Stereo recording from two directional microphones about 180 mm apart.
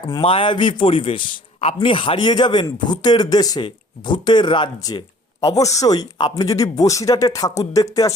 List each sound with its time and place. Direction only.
0.0 s a man's voice: 25° left (ahead or behind)